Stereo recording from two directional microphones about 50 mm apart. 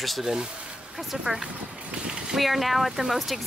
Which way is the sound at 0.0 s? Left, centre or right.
Centre.